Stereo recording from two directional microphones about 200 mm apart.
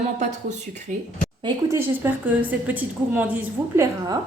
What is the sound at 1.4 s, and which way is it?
A woman's voice, 15° right (ahead or behind).